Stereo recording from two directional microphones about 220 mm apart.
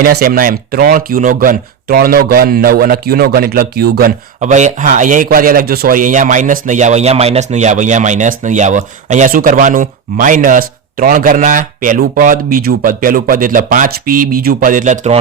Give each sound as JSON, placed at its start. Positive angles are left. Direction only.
{"t": 0.0, "sound": "speech", "side_deg": -40}